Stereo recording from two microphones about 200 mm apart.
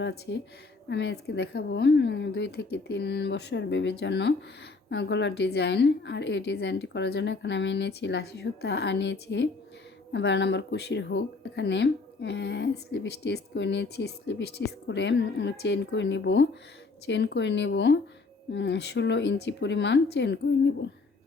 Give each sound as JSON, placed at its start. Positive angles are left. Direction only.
{"t": 0.0, "sound": "speech", "side_deg": 60}